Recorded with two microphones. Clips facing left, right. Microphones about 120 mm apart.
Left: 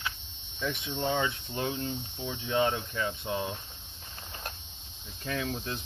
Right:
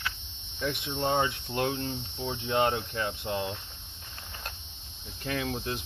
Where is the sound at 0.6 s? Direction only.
65° right (ahead or behind).